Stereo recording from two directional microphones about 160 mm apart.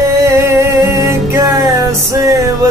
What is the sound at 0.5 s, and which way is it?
Music, 15° right (ahead or behind).